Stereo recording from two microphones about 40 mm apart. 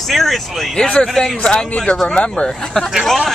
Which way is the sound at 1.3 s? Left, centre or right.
Left.